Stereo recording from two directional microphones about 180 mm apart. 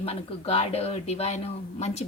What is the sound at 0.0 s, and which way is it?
Speech, 35° left (ahead or behind).